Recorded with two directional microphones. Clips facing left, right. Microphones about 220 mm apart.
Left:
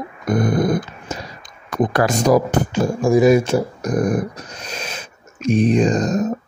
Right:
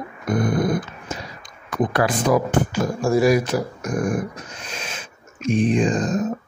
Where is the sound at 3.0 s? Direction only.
20° left (ahead or behind); by 6.3 s 40° left (ahead or behind).